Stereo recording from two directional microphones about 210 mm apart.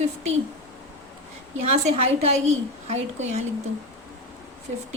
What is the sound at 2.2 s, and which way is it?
A woman's voice, 35° right (ahead or behind).